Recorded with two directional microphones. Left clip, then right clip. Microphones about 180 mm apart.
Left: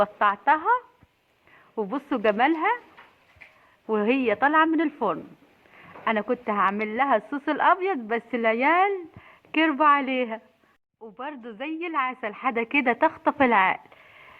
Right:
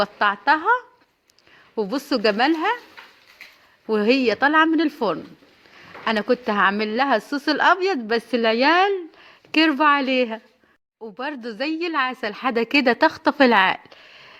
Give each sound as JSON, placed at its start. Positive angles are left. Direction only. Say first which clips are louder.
{"t": 0.0, "sound": "a woman's voice", "louder": "right 2 dB", "side_deg": -35}
{"t": 3.8, "sound": "a woman's voice", "louder": "right 4 dB", "side_deg": -35}
{"t": 11.0, "sound": "a woman's voice", "louder": "right 6 dB", "side_deg": -55}